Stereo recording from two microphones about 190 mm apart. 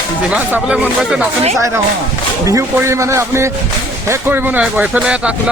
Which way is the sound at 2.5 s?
15° right (ahead or behind).